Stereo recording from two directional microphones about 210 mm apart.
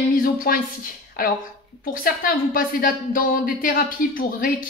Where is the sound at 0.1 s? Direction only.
40° left (ahead or behind).